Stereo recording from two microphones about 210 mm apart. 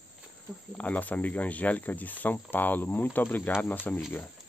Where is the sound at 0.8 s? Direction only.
5° left (ahead or behind).